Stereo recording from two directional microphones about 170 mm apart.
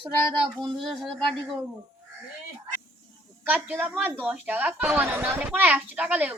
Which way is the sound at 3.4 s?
10° right (ahead or behind).